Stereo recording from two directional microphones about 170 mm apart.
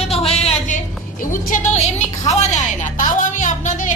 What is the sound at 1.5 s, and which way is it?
A woman's voice, 45° left (ahead or behind).